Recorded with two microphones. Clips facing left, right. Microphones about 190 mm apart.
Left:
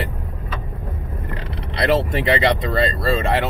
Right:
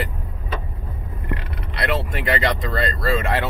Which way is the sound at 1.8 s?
25° left (ahead or behind).